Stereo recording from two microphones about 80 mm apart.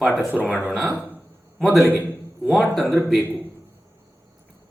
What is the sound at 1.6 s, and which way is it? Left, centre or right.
Speech, centre.